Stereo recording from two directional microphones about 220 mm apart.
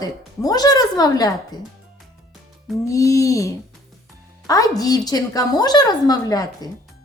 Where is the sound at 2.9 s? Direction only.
15° left (ahead or behind).